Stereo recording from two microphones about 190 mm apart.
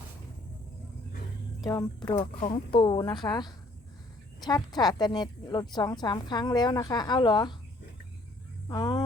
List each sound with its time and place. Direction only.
1.6 s a woman's voice: 20° left (ahead or behind)
8.6 s speech: 20° left (ahead or behind)